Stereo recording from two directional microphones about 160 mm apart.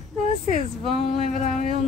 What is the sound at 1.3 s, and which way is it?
Speech, 50° left (ahead or behind).